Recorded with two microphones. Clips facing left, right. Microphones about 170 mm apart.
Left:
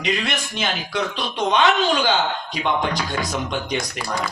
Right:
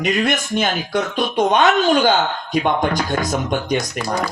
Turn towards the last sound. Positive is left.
turn(degrees=-50)  # may be behind; listen again after turning